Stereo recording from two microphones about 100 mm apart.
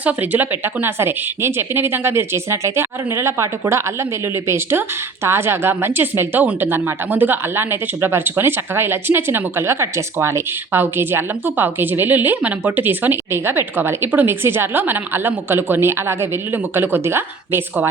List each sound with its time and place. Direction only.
0.0 s a woman's voice: 15° right (ahead or behind)